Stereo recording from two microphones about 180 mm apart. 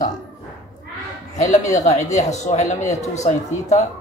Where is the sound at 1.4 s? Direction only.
40° left (ahead or behind).